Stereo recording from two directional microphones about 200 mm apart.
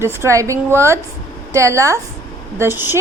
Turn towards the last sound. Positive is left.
turn(degrees=-10)  # may be behind; listen again after turning